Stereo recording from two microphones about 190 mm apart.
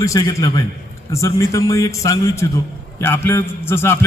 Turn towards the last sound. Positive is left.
turn(degrees=15)  # may be behind; listen again after turning